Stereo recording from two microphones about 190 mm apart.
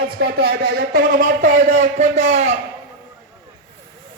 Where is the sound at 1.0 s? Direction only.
45° right (ahead or behind).